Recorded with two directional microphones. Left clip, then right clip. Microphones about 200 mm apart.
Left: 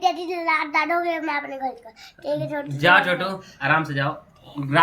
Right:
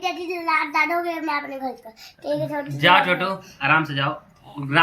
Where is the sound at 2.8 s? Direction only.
60° left (ahead or behind).